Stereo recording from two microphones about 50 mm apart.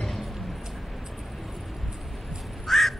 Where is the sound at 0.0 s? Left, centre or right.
Centre.